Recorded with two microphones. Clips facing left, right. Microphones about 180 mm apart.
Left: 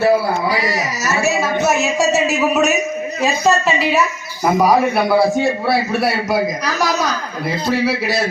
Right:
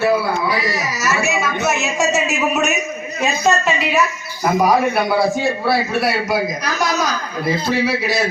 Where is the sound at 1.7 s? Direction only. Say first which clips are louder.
Left 3 dB; 35° left (ahead or behind).